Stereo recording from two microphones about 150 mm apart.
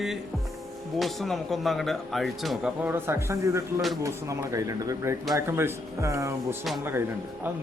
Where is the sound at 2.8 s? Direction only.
15° right (ahead or behind).